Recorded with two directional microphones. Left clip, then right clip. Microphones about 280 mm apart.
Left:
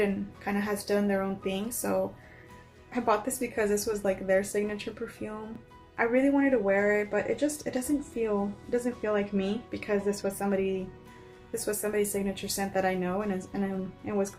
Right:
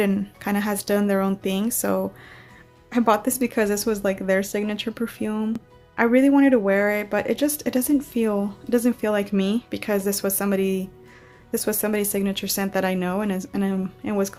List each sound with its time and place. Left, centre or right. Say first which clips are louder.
0.0 s speech: right 5 dB; right